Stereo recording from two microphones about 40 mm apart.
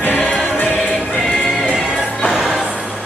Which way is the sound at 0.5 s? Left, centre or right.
Left.